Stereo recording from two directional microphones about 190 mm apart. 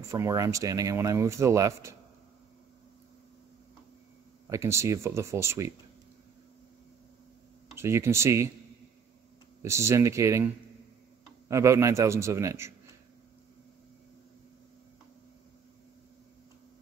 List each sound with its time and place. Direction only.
0.1 s speech: 15° right (ahead or behind)
4.5 s speech: 15° right (ahead or behind)
7.7 s speech: 15° right (ahead or behind)
9.6 s speech: 15° right (ahead or behind)